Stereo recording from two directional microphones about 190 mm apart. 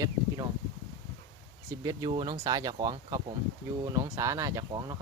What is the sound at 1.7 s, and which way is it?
Speech, 20° right (ahead or behind).